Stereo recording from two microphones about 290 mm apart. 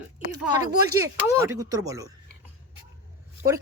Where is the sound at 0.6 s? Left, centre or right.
Centre.